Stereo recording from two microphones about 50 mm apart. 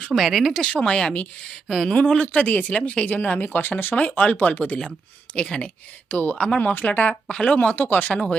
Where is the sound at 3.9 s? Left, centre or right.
Left.